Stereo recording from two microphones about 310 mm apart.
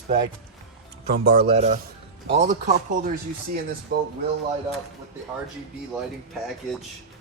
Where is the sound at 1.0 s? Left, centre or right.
Right.